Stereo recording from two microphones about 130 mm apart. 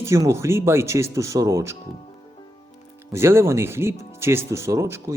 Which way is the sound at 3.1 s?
20° right (ahead or behind).